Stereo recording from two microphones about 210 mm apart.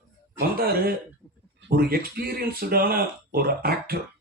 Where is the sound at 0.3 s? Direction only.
45° right (ahead or behind).